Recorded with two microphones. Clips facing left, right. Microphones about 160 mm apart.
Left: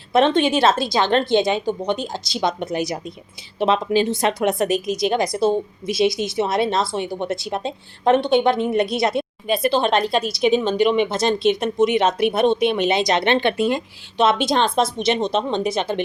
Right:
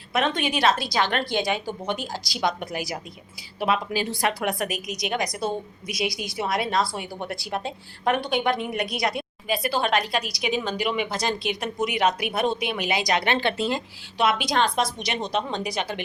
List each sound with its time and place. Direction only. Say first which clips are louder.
0.1 s speech: left 8 dB; 30° left (ahead or behind)